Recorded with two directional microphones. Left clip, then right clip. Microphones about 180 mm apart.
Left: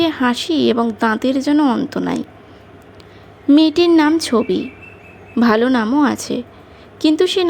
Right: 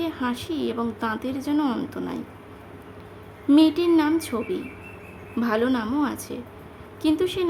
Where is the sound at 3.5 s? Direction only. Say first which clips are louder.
Left 6 dB; 35° left (ahead or behind).